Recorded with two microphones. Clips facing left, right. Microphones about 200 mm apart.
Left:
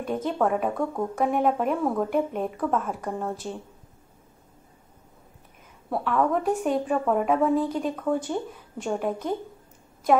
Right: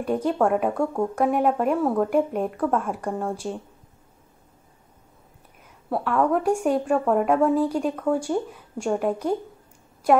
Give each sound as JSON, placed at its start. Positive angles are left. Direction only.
{"t": 0.0, "sound": "a woman's voice", "side_deg": -5}
{"t": 5.9, "sound": "a woman's voice", "side_deg": -5}
{"t": 6.6, "sound": "speech", "side_deg": 0}
{"t": 8.1, "sound": "a woman's voice", "side_deg": -10}